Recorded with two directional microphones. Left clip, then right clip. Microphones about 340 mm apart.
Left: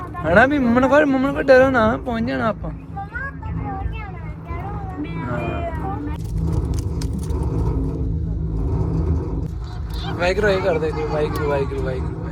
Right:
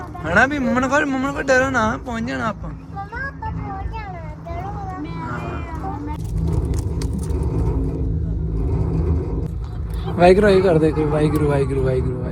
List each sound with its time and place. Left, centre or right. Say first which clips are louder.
0.3 s speech: left 2 dB; centre
10.2 s speech: right 6 dB; centre